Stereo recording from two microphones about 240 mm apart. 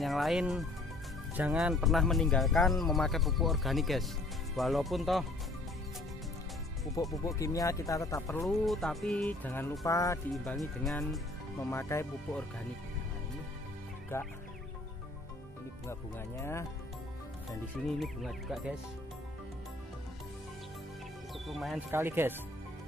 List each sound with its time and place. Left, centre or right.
0.0 s speech: centre
7.0 s music: centre
8.5 s music: centre
10.3 s speech: centre
11.7 s music: centre
14.1 s music: centre
17.7 s speech: centre
21.5 s speech: centre